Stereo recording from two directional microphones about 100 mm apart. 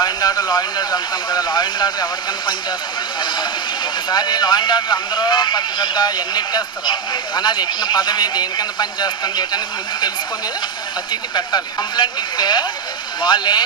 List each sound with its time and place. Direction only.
0.0 s speech: 40° left (ahead or behind)
3.2 s speech: 50° left (ahead or behind)
11.1 s speech: 45° left (ahead or behind)